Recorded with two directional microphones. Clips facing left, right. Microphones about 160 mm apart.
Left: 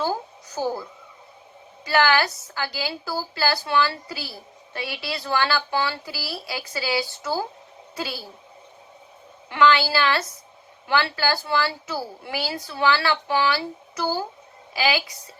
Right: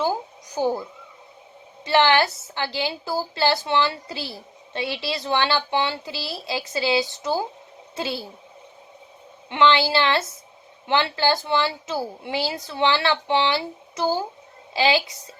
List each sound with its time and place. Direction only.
0.0 s a sound: 15° right (ahead or behind)
1.8 s a woman's voice: 25° right (ahead or behind)
9.5 s a woman's voice: 25° right (ahead or behind)